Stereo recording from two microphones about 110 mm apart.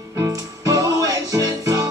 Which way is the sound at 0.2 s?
30° right (ahead or behind).